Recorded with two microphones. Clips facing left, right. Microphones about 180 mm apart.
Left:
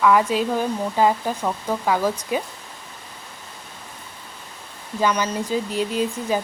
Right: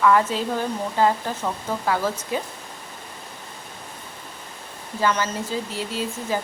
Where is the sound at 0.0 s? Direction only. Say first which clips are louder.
Left 1 dB; 10° left (ahead or behind).